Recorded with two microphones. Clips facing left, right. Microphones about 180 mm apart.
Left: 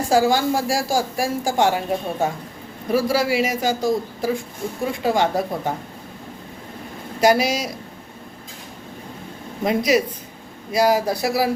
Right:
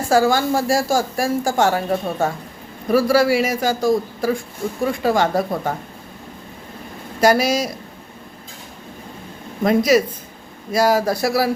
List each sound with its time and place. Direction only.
0.1 s speech: 15° left (ahead or behind)
7.2 s speech: 15° left (ahead or behind)
9.6 s speech: 15° left (ahead or behind)